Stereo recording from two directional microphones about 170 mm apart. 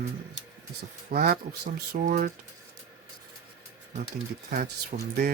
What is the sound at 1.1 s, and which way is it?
Speech, 65° right (ahead or behind).